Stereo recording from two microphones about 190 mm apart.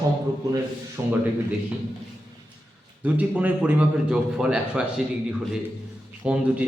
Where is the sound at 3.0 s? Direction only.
10° right (ahead or behind).